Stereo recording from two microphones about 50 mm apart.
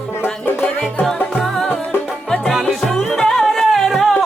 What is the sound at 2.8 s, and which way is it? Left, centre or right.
Music, centre.